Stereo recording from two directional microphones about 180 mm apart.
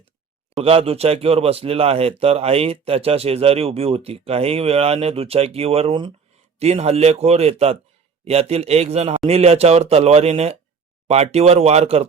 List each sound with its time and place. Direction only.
0.6 s speech: 35° right (ahead or behind)